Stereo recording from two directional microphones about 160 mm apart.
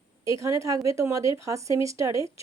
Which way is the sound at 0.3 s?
20° right (ahead or behind).